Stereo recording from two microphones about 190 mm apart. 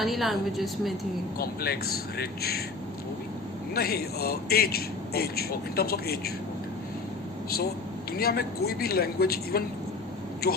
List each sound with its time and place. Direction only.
0.0 s a woman's voice: centre (ahead or behind)
1.4 s a man's voice: 55° left (ahead or behind)
3.8 s a man's voice: 55° left (ahead or behind)
8.1 s a man's voice: 55° left (ahead or behind)